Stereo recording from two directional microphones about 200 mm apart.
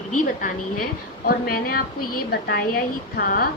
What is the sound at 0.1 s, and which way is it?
A woman's voice, 45° left (ahead or behind).